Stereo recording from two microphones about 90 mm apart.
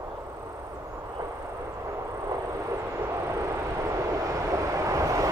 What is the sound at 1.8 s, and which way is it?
Vehicle, 35° right (ahead or behind).